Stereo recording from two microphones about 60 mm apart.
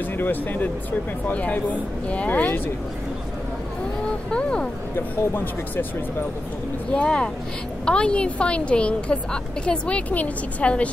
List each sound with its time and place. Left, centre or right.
0.2 s a woman's voice: left
4.3 s a sound: centre
4.9 s speech: left
6.9 s a woman's voice: centre